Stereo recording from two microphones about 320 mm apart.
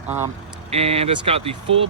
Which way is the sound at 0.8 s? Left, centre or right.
Centre.